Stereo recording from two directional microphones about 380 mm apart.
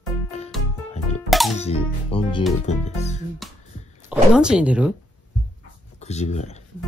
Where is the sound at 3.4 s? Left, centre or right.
Centre.